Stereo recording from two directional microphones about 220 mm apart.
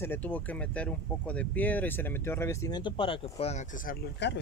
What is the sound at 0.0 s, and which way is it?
Speech, 10° left (ahead or behind).